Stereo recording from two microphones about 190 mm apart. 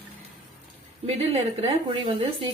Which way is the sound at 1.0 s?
35° right (ahead or behind).